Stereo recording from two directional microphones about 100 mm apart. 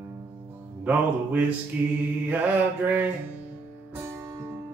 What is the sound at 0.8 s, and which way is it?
Music, 15° right (ahead or behind).